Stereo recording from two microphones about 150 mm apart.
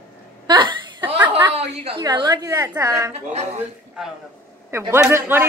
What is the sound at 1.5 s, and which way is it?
Speech, 45° right (ahead or behind).